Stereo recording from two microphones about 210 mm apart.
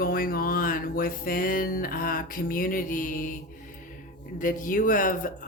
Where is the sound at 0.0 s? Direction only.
45° left (ahead or behind).